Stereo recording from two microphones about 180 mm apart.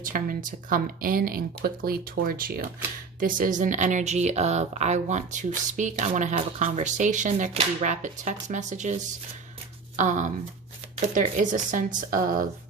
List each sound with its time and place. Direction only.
0.0 s speech: 50° right (ahead or behind)